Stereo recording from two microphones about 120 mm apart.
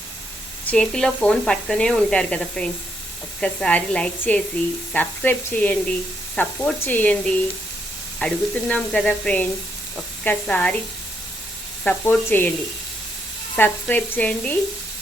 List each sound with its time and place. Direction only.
0.7 s speech: 5° left (ahead or behind)
11.9 s speech: 15° left (ahead or behind)
13.6 s speech: 15° left (ahead or behind)